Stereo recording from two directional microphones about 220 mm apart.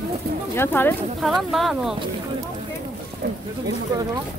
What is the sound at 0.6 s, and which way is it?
Speech, 10° left (ahead or behind).